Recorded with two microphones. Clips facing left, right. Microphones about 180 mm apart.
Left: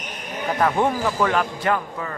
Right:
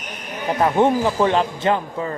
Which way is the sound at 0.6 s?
20° right (ahead or behind).